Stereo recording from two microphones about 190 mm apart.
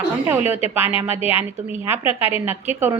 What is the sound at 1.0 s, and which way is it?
A woman's voice, 10° right (ahead or behind).